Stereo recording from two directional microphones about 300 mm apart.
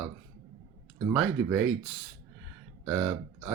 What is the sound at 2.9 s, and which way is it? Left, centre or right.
Speech, centre.